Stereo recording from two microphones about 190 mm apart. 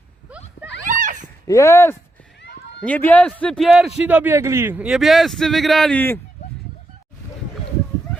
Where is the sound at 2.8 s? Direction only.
10° left (ahead or behind).